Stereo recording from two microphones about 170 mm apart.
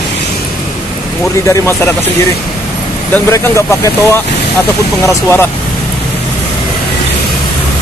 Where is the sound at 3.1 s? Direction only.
15° left (ahead or behind).